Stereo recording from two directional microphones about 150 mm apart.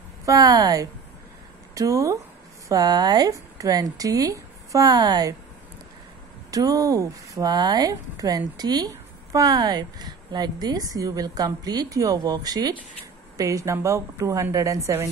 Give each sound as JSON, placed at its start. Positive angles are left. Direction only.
{"t": 0.2, "sound": "speech", "side_deg": -25}
{"t": 6.5, "sound": "speech", "side_deg": -25}